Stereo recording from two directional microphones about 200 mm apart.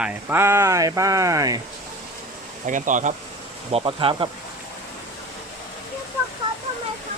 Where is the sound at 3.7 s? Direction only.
30° right (ahead or behind).